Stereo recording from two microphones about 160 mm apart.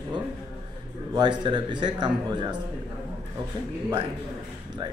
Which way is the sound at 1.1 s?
25° right (ahead or behind).